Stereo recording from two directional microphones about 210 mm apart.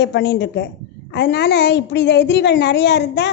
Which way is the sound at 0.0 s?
55° left (ahead or behind).